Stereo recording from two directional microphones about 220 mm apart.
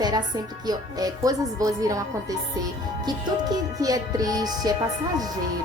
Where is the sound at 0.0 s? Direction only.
20° right (ahead or behind).